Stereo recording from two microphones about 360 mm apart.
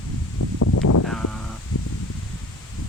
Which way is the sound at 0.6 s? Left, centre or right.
Left.